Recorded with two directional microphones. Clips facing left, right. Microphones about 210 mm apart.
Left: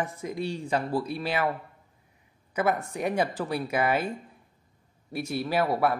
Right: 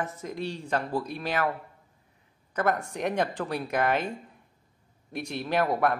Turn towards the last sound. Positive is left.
turn(degrees=5)  # may be behind; listen again after turning